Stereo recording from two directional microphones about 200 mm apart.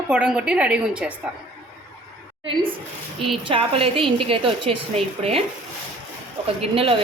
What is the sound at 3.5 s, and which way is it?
A woman's voice, 25° right (ahead or behind).